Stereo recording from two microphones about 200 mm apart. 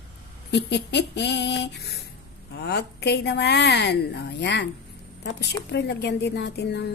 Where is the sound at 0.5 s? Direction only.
60° left (ahead or behind).